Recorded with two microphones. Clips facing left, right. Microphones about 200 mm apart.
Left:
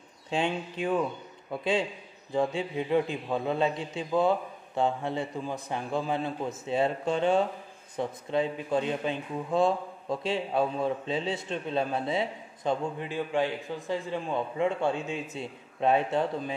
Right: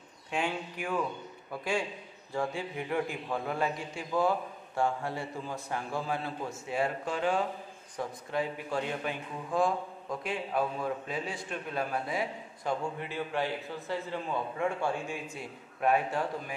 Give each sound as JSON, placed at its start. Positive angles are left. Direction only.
{"t": 0.3, "sound": "a man's voice", "side_deg": 25}